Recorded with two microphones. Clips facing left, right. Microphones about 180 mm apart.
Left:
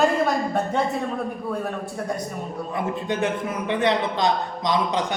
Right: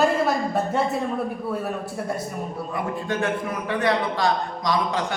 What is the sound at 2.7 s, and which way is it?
A man's voice, 20° left (ahead or behind).